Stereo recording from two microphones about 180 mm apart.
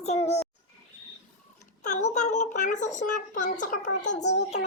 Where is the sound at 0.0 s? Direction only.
40° left (ahead or behind).